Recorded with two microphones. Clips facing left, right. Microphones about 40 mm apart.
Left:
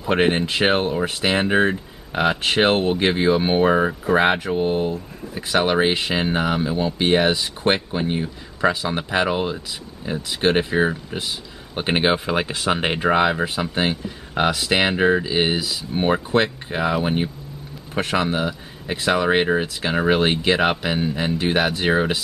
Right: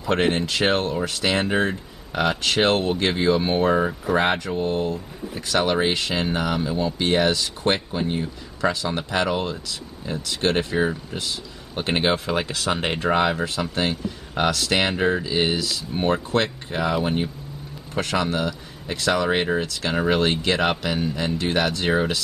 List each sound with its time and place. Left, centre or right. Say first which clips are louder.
0.1 s speech: left 2 dB; left